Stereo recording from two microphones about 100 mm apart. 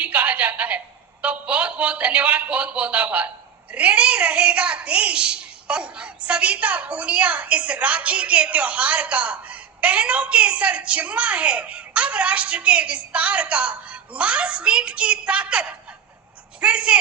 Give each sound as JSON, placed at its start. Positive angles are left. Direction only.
{"t": 0.0, "sound": "a woman's voice", "side_deg": -15}